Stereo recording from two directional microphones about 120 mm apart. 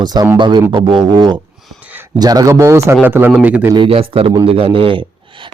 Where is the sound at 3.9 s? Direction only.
55° right (ahead or behind).